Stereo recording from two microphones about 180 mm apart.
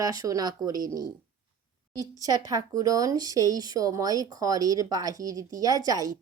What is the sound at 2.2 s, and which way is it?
Speech, 20° right (ahead or behind).